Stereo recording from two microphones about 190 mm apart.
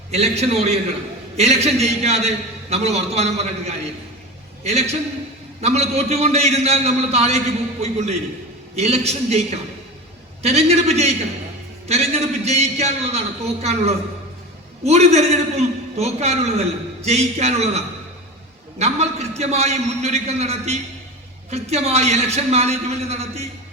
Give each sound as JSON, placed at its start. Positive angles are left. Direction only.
{"t": 0.1, "sound": "a man's voice", "side_deg": -35}
{"t": 10.4, "sound": "a man's voice", "side_deg": -35}